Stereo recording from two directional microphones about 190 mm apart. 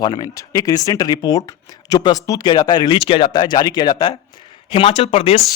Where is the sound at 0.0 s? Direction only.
20° left (ahead or behind).